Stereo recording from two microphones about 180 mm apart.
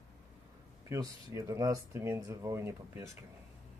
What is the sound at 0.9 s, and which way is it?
Speech, 20° right (ahead or behind).